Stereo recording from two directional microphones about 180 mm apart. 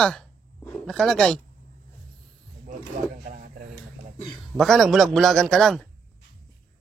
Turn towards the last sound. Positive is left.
turn(degrees=0)  # may be behind; listen again after turning